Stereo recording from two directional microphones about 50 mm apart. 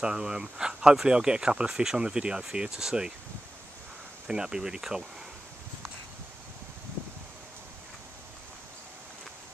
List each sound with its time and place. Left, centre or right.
0.0 s speech: centre
4.3 s speech: centre